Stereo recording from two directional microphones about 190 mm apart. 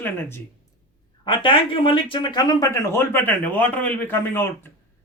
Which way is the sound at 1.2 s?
25° left (ahead or behind).